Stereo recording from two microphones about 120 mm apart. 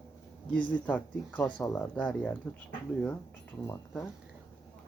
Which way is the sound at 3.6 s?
20° left (ahead or behind).